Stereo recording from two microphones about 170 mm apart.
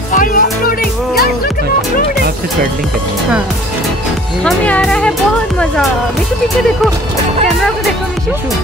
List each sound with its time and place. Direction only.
0.1 s music: 50° left (ahead or behind)
4.5 s speech: 5° left (ahead or behind)
7.4 s speech: centre (ahead or behind)